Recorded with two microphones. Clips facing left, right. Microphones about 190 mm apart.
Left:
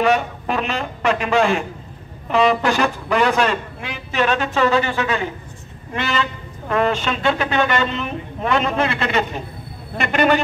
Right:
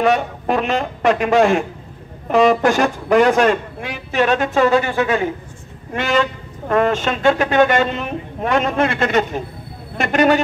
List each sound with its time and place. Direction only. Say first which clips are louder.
0.0 s a man's voice: right 1 dB; 50° right (ahead or behind)